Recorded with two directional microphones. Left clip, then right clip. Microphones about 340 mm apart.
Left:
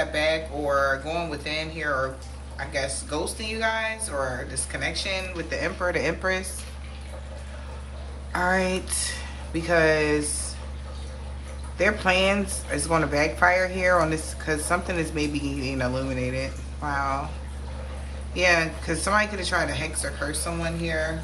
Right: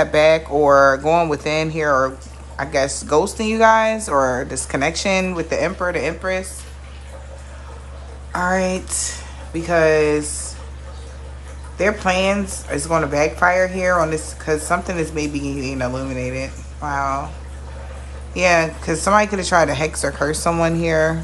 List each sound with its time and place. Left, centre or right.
0.1 s speech: centre
8.3 s speech: centre
11.8 s speech: centre
18.3 s speech: centre